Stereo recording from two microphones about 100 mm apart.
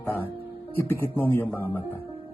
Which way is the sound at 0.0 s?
20° left (ahead or behind).